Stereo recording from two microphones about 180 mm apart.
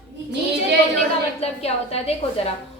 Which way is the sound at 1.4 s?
35° left (ahead or behind).